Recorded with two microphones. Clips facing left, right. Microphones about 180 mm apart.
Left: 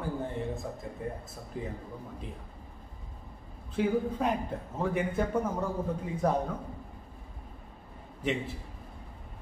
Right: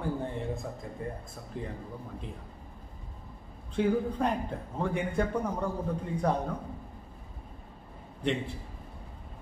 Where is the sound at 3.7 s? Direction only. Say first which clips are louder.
Right 1 dB; 5° left (ahead or behind).